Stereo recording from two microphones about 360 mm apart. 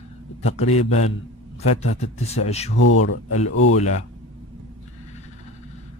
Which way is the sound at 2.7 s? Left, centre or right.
Left.